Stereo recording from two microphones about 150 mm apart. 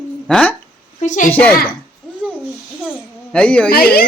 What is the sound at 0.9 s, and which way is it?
Speech, 55° left (ahead or behind).